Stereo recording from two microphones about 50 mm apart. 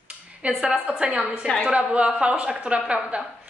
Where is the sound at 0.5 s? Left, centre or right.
Centre.